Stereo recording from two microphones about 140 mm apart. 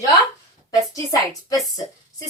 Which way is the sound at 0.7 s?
25° left (ahead or behind).